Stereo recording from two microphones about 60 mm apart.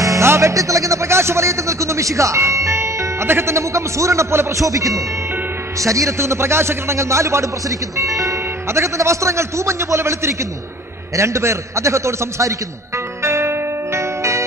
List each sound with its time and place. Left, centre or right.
0.0 s music: right
0.3 s a man's voice: right
13.2 s music: right